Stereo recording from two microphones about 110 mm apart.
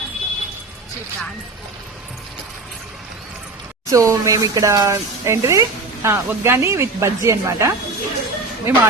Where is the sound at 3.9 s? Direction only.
30° right (ahead or behind).